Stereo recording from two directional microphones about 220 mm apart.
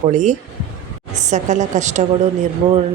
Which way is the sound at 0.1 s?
35° right (ahead or behind).